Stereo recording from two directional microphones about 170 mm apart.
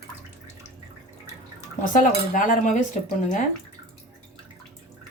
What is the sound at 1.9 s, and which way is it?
Cutlery, 50° left (ahead or behind).